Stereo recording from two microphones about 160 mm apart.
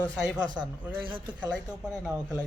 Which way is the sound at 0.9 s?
30° right (ahead or behind).